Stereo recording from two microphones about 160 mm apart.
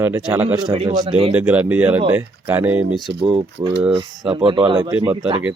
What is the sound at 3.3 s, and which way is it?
Speech, 40° right (ahead or behind).